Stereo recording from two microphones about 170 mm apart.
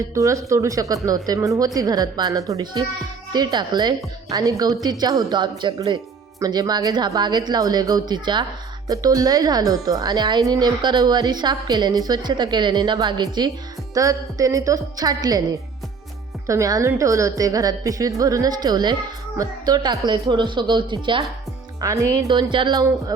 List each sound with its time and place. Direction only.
0.1 s a woman's voice: 20° right (ahead or behind)
16.5 s a woman's voice: 20° right (ahead or behind)